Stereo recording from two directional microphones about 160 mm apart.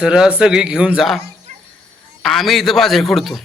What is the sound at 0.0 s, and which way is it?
Speech, 5° right (ahead or behind).